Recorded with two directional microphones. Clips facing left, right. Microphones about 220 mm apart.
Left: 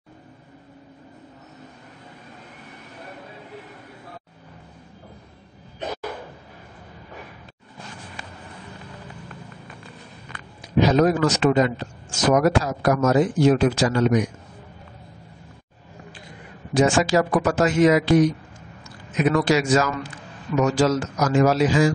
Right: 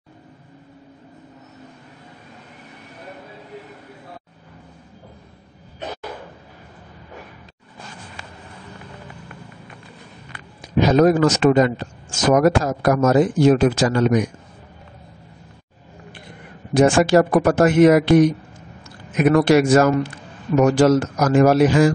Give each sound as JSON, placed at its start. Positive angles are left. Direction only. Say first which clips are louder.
{"t": 10.8, "sound": "speech", "louder": "right 3 dB", "side_deg": -50}
{"t": 16.7, "sound": "a man's voice", "louder": "right 4 dB", "side_deg": -55}